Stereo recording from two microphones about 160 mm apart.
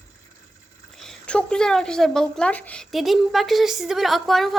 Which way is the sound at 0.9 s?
5° left (ahead or behind).